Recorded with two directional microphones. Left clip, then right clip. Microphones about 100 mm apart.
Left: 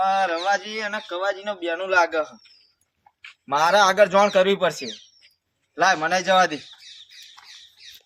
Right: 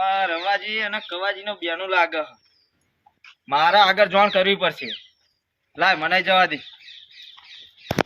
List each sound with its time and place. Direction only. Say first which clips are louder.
0.0 s a sound: even; 15° left (ahead or behind)
0.5 s speech: right 2 dB; 15° left (ahead or behind)
3.5 s speech: right 1 dB; 25° left (ahead or behind)